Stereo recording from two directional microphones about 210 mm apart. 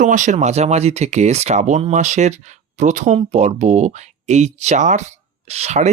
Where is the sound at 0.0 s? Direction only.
35° right (ahead or behind).